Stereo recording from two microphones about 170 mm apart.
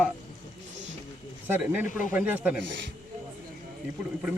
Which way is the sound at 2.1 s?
10° right (ahead or behind).